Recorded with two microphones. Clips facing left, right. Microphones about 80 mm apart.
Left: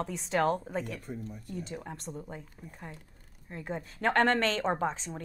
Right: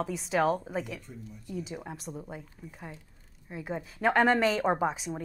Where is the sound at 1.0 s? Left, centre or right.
Left.